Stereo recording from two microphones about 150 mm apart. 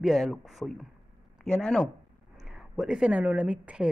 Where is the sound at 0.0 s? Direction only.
Centre (ahead or behind).